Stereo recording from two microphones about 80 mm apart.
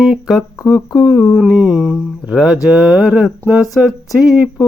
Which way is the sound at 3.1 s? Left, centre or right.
Centre.